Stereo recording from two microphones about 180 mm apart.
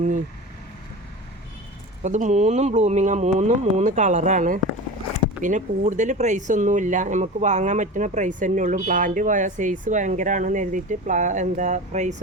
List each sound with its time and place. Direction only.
2.0 s speech: 40° right (ahead or behind)